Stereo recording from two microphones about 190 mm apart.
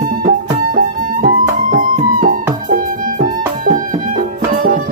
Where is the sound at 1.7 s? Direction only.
45° right (ahead or behind).